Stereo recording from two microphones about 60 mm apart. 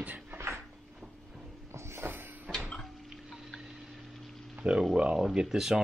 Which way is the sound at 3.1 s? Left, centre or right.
Centre.